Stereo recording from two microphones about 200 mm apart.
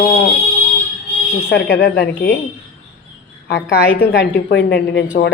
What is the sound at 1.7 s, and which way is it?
Speech, 50° left (ahead or behind).